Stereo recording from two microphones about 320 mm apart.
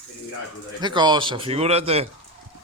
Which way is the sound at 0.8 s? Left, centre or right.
Centre.